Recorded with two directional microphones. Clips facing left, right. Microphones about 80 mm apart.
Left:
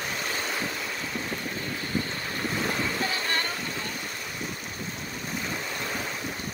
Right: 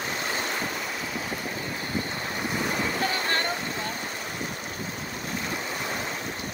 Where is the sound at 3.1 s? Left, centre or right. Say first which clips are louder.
Right 2 dB; right.